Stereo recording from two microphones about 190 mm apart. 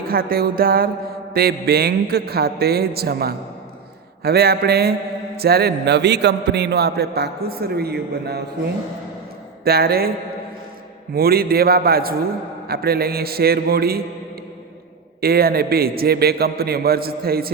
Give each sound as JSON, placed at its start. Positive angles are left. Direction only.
{"t": 0.1, "sound": "a man's voice", "side_deg": -50}
{"t": 9.6, "sound": "a man's voice", "side_deg": -55}
{"t": 11.1, "sound": "a man's voice", "side_deg": -55}
{"t": 15.2, "sound": "a man's voice", "side_deg": -55}